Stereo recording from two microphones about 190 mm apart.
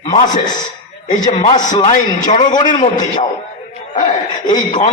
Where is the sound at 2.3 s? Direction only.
40° left (ahead or behind).